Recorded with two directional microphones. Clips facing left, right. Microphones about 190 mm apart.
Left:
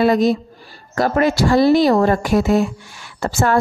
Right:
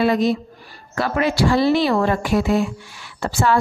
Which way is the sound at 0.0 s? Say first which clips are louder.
Left 3 dB; 40° left (ahead or behind).